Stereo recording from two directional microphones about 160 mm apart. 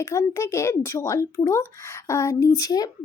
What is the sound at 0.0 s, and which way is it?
A child's voice, 15° left (ahead or behind).